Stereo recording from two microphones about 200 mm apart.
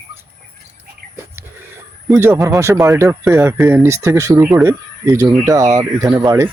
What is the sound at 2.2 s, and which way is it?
Speech, 15° right (ahead or behind).